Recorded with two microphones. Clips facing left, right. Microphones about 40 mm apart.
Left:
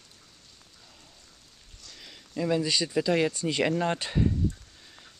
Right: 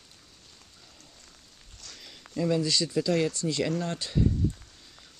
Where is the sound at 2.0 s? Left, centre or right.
Centre.